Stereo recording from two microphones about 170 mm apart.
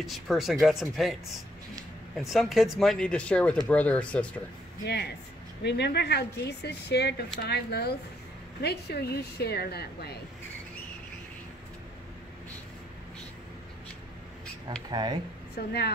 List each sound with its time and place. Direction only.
0.0 s speech: centre (ahead or behind)
2.1 s speech: centre (ahead or behind)
4.8 s speech: 75° left (ahead or behind)
14.9 s speech: 25° right (ahead or behind)
15.5 s speech: 70° left (ahead or behind)